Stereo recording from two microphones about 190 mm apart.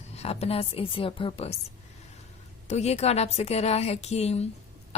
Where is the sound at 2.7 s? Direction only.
35° left (ahead or behind).